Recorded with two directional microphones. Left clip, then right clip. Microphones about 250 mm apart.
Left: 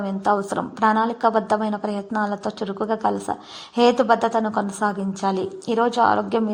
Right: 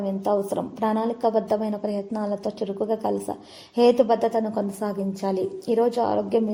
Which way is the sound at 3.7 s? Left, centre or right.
Centre.